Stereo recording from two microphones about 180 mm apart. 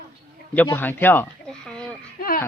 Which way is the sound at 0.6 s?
10° left (ahead or behind).